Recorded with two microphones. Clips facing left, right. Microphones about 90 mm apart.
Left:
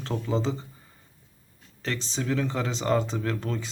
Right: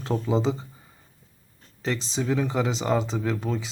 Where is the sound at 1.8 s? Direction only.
5° right (ahead or behind).